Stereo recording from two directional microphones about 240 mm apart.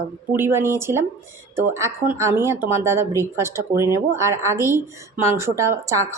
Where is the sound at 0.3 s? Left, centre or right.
Centre.